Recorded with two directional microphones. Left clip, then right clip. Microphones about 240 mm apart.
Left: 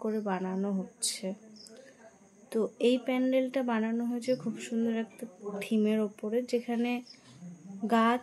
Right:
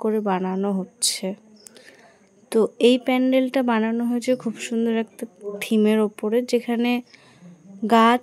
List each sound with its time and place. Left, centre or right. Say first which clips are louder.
0.0 s a woman's voice: right 10 dB; right
2.5 s a woman's voice: right 10 dB; right